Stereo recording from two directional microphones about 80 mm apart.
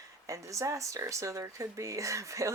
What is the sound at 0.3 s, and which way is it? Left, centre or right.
Speech, right.